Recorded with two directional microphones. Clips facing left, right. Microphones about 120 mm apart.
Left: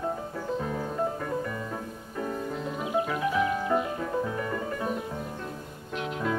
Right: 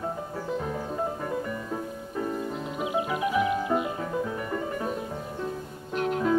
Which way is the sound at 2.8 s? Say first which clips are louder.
Right 1 dB; 15° right (ahead or behind).